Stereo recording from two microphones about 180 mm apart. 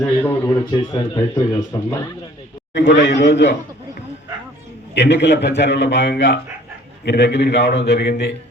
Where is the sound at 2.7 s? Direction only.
75° left (ahead or behind).